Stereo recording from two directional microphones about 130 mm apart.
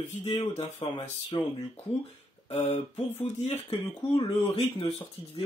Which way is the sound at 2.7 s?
55° left (ahead or behind).